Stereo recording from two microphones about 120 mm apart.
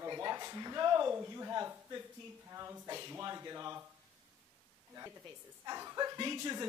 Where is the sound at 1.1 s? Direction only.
20° right (ahead or behind).